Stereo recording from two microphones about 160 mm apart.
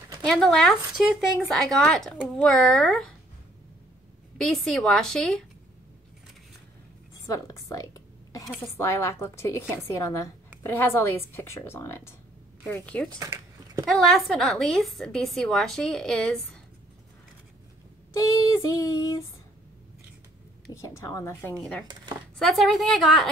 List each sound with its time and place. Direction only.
0.2 s a woman's voice: 5° left (ahead or behind)
4.4 s a woman's voice: 5° left (ahead or behind)
7.2 s a sound: 20° left (ahead or behind)
8.7 s a woman's voice: 15° left (ahead or behind)
18.1 s female singing: 20° left (ahead or behind)
20.7 s female singing: 20° left (ahead or behind)
21.5 s a woman's voice: 5° left (ahead or behind)